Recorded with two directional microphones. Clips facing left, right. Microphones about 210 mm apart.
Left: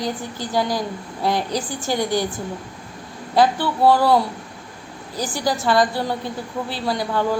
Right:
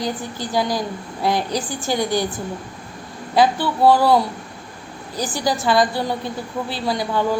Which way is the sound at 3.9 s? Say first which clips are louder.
Right 1 dB; 10° right (ahead or behind).